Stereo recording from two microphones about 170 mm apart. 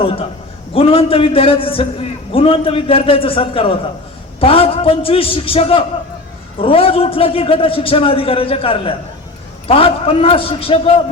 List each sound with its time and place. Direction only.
0.7 s a man's voice: 35° left (ahead or behind)